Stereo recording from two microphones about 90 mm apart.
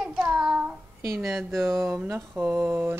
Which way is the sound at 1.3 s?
Centre (ahead or behind).